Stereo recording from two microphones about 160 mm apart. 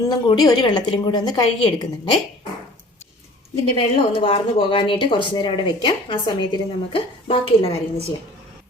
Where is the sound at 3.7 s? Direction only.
35° left (ahead or behind).